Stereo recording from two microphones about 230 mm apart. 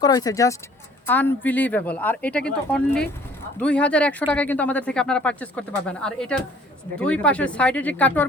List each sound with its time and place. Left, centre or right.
0.0 s speech: centre